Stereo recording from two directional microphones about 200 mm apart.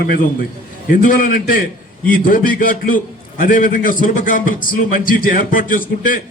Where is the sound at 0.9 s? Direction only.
45° left (ahead or behind).